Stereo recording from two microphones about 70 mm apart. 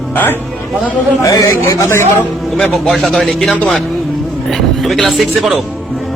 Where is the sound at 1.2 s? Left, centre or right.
Left.